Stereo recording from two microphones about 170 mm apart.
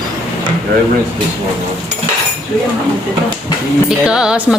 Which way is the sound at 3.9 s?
5° right (ahead or behind).